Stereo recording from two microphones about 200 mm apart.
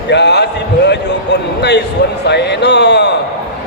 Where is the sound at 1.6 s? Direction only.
55° left (ahead or behind).